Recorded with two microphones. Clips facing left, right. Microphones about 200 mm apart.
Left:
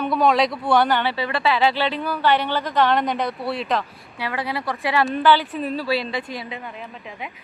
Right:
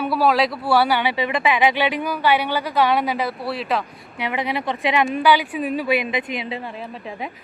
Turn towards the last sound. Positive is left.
turn(degrees=-35)  # may be behind; listen again after turning